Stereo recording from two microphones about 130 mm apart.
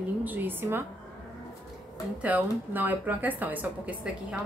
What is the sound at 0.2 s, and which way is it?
Speech, 15° right (ahead or behind).